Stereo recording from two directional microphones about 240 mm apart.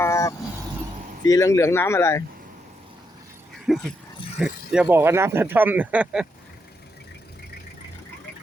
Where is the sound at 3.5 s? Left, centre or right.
Centre.